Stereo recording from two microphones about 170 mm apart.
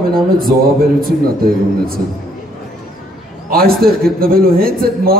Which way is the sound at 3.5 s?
60° right (ahead or behind).